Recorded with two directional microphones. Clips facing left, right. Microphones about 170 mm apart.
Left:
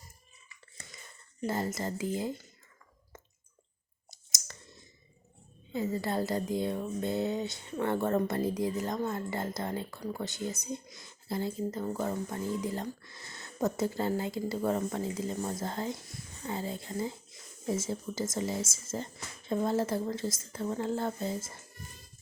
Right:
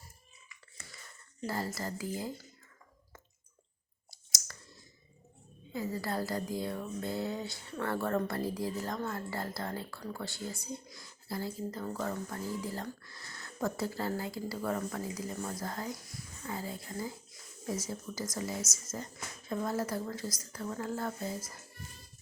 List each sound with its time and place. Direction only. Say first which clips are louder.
0.9 s speech: left 1 dB; 20° left (ahead or behind)
4.1 s clicking: left 1 dB; 20° left (ahead or behind)
5.7 s speech: left 4 dB; 25° left (ahead or behind)